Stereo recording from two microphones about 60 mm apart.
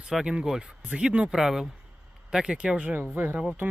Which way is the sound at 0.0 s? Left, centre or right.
Centre.